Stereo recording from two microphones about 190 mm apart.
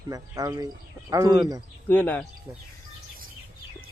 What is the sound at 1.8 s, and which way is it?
Speech, 10° left (ahead or behind).